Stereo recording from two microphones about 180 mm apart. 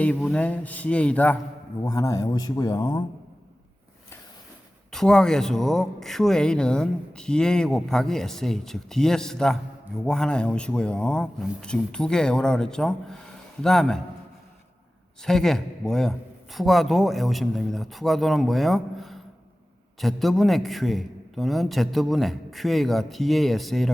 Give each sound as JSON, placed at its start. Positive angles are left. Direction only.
{"t": 0.0, "sound": "a man's voice", "side_deg": 10}
{"t": 1.8, "sound": "speech", "side_deg": 20}
{"t": 4.9, "sound": "speech", "side_deg": 5}
{"t": 15.2, "sound": "speech", "side_deg": 0}